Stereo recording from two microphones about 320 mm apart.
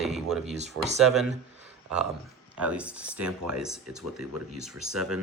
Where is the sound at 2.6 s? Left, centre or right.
Centre.